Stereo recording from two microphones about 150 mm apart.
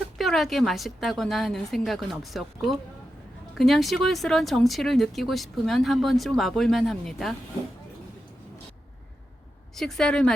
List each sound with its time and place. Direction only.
0.2 s speech: centre (ahead or behind)
9.7 s speech: 5° left (ahead or behind)